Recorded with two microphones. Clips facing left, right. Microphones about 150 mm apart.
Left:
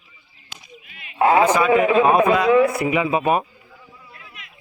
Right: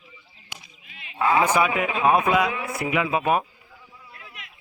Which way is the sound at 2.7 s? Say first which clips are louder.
Left 4 dB; centre (ahead or behind).